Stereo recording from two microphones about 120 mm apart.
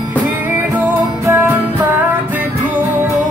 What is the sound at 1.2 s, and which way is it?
Music, 15° right (ahead or behind).